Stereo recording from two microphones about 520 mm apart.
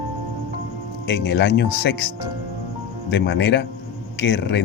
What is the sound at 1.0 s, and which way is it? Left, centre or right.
Speech, centre.